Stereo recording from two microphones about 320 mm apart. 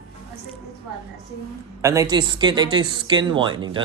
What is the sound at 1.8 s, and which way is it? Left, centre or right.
Speech, centre.